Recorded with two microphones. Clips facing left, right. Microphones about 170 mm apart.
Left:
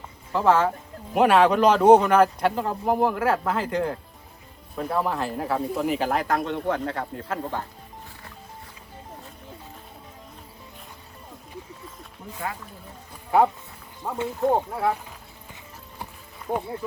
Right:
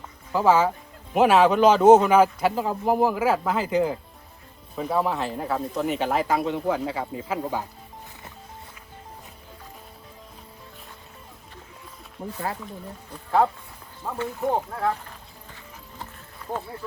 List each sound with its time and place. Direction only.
0.3 s speech: 5° right (ahead or behind)
12.2 s speech: 60° right (ahead or behind)
14.0 s speech: 15° left (ahead or behind)
16.5 s speech: 15° left (ahead or behind)